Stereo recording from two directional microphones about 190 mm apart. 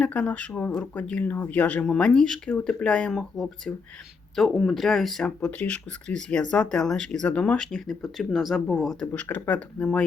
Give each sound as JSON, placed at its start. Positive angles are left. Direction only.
{"t": 0.0, "sound": "speech", "side_deg": 10}